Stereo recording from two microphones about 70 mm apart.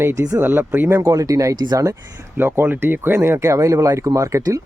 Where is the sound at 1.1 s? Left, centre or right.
Right.